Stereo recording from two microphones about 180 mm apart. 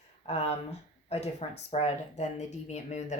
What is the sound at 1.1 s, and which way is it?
Speech, 35° left (ahead or behind).